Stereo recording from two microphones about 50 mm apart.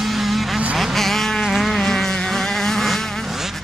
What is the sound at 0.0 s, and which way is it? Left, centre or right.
Vehicle, centre.